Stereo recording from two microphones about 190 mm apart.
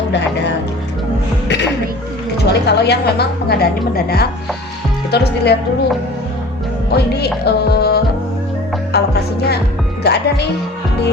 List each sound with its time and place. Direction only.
2.4 s a woman's voice: 60° left (ahead or behind)
6.9 s a woman's voice: 60° left (ahead or behind)